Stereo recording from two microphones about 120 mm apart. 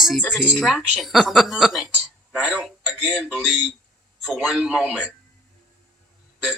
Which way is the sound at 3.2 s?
5° left (ahead or behind).